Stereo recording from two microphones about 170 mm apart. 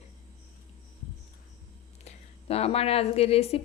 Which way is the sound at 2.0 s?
35° left (ahead or behind).